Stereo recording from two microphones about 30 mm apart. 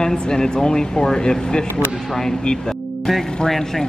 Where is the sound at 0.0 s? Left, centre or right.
Left.